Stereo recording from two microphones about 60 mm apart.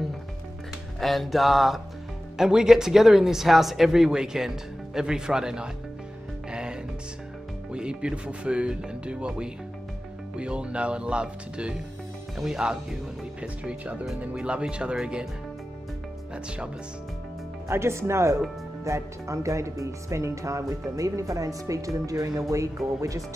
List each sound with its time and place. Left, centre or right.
0.9 s a sound: centre
2.3 s speech: centre
6.5 s music: centre
7.7 s speech: centre
16.4 s speech: centre
17.6 s speech: right
22.5 s speech: right